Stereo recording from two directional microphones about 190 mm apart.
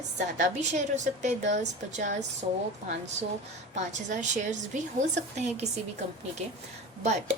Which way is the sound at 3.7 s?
40° right (ahead or behind).